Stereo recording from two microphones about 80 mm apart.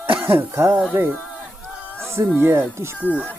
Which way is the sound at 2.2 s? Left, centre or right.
Right.